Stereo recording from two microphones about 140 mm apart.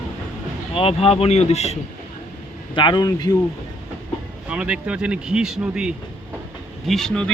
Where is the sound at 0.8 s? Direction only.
45° left (ahead or behind).